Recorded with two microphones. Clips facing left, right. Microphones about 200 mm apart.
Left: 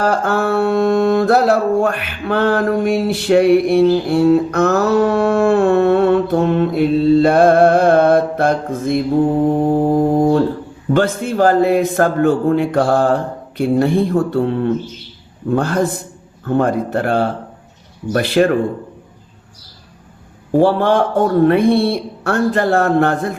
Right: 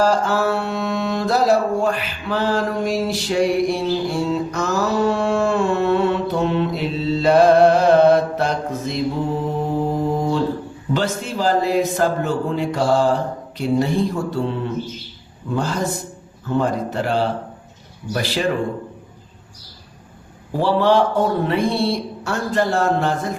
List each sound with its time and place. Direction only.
0.0 s mantra: 60° left (ahead or behind)
20.6 s mantra: 50° left (ahead or behind)